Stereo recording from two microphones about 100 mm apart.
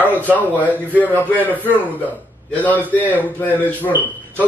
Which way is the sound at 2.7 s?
15° right (ahead or behind).